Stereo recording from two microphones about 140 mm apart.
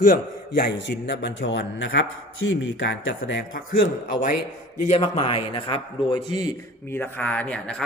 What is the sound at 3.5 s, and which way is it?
Speech, 90° left.